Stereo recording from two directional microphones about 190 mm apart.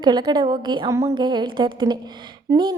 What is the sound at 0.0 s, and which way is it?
A woman's voice, 20° right (ahead or behind).